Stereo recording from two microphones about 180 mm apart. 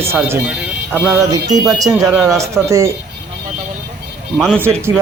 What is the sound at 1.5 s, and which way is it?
Speech, 20° right (ahead or behind).